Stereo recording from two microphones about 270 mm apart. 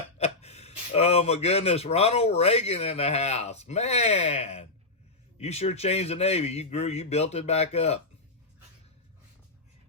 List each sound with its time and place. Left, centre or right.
0.2 s speech: left